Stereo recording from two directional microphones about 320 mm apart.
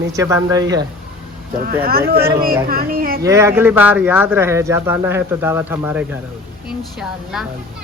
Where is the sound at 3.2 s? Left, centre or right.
Centre.